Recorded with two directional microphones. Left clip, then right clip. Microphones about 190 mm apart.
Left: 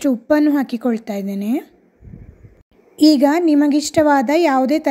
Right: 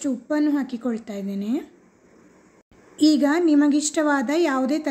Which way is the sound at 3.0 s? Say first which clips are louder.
Left 6 dB; 35° left (ahead or behind).